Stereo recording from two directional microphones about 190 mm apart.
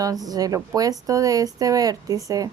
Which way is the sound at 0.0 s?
20° right (ahead or behind).